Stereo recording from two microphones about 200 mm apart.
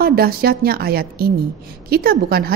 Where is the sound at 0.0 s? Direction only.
50° right (ahead or behind).